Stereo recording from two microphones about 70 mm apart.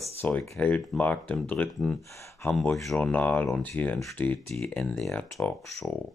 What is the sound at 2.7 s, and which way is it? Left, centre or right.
Speech, centre.